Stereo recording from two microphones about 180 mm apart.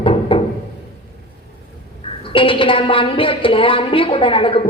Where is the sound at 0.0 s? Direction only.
30° left (ahead or behind).